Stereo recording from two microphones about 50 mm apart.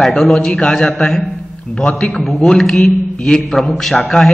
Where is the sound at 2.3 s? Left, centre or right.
Centre.